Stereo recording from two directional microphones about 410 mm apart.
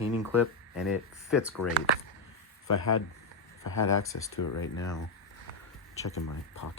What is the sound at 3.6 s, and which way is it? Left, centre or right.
Speech, left.